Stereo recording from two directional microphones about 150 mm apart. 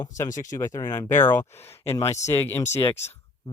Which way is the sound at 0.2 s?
20° left (ahead or behind).